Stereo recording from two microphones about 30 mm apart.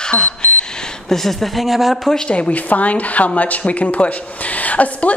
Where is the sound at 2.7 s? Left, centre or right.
Left.